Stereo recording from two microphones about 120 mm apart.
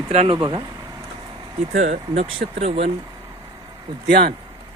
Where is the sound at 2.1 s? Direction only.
50° right (ahead or behind).